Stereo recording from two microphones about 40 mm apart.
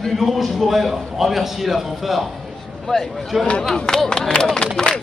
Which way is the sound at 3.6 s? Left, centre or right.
Centre.